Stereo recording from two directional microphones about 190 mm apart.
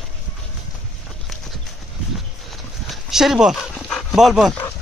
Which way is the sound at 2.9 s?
Centre (ahead or behind).